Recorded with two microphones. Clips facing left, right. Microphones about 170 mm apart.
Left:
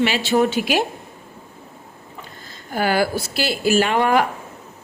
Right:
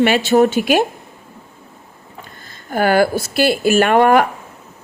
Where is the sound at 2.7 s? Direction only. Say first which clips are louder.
Right 5 dB; 55° right (ahead or behind).